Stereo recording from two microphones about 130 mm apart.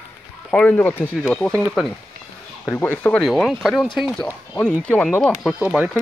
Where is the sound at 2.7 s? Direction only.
15° left (ahead or behind).